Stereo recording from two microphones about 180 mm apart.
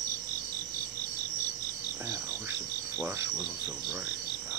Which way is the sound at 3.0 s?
15° right (ahead or behind).